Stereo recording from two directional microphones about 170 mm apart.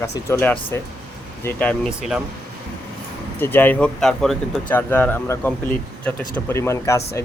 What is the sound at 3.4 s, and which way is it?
Speech, 10° left (ahead or behind).